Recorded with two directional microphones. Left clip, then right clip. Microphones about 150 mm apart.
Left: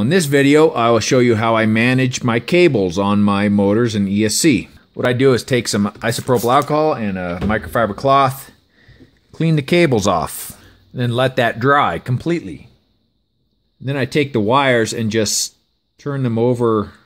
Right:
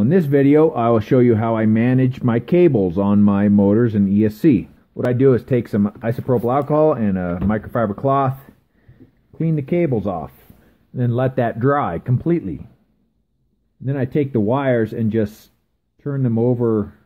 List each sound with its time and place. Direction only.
0.0 s speech: 10° left (ahead or behind)
6.7 s speech: centre (ahead or behind)
7.4 s speech: 10° left (ahead or behind)
9.4 s speech: 30° left (ahead or behind)
9.8 s speech: 50° left (ahead or behind)
11.0 s speech: 10° left (ahead or behind)
13.8 s speech: 15° left (ahead or behind)